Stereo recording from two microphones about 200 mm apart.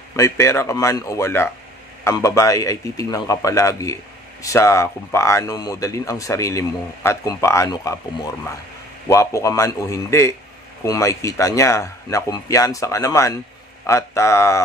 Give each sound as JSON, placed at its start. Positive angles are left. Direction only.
{"t": 0.1, "sound": "speech", "side_deg": 15}